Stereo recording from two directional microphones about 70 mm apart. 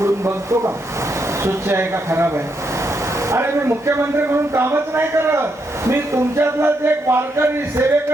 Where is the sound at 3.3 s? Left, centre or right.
Right.